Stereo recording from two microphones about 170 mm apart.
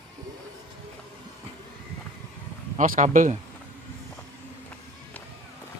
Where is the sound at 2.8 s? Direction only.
50° right (ahead or behind).